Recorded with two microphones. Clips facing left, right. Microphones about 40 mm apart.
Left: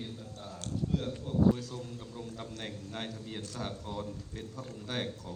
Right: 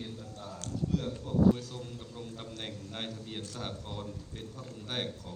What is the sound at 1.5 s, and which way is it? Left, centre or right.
A man's voice, right.